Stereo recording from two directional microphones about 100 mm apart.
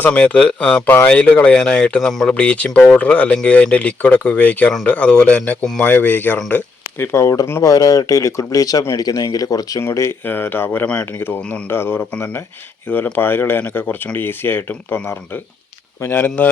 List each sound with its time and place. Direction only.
0.0 s speech: 15° left (ahead or behind)
7.0 s speech: 25° left (ahead or behind)
9.8 s speech: 25° left (ahead or behind)